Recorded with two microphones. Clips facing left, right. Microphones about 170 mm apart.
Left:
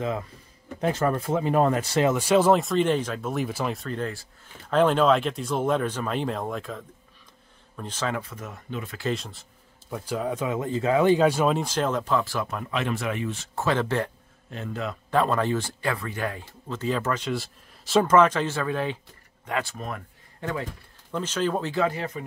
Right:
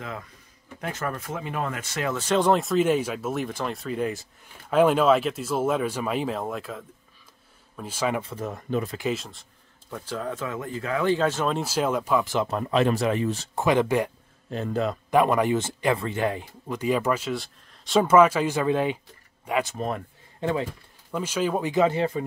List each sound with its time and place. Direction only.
0.7 s speech: 30° left (ahead or behind)
2.0 s speech: 10° left (ahead or behind)
4.0 s speech: 20° right (ahead or behind)
4.6 s speech: 10° right (ahead or behind)
8.2 s speech: 30° right (ahead or behind)
9.1 s speech: centre (ahead or behind)
9.8 s speech: 10° left (ahead or behind)
11.5 s speech: 5° right (ahead or behind)
12.4 s speech: 35° right (ahead or behind)
13.6 s speech: 15° right (ahead or behind)
14.5 s speech: 35° right (ahead or behind)
15.0 s speech: 15° right (ahead or behind)
19.7 s speech: 25° right (ahead or behind)
21.1 s speech: 10° right (ahead or behind); by 22.2 s 30° right (ahead or behind)